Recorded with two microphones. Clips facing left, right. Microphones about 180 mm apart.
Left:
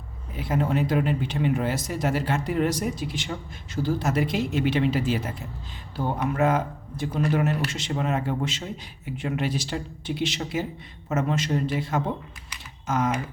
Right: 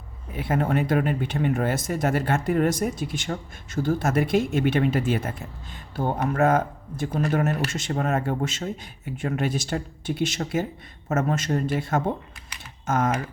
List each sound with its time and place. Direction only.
0.3 s speech: 55° right (ahead or behind)